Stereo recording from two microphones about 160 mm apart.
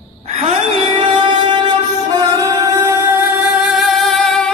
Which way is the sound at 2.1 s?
20° right (ahead or behind).